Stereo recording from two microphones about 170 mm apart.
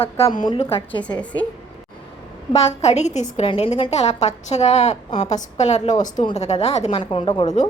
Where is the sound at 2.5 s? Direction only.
40° left (ahead or behind).